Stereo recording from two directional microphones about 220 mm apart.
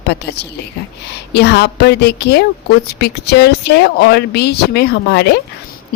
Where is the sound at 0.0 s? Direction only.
50° left (ahead or behind).